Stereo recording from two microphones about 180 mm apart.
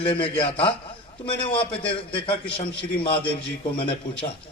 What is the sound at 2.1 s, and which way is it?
A man's voice, 30° left (ahead or behind).